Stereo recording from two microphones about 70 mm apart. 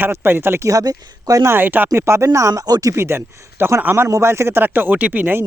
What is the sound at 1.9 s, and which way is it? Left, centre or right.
Speech, right.